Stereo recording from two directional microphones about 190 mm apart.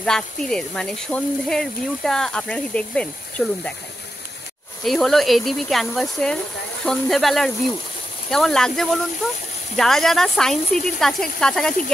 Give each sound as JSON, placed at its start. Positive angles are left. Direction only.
{"t": 0.0, "sound": "speech", "side_deg": 5}
{"t": 4.8, "sound": "speech", "side_deg": 0}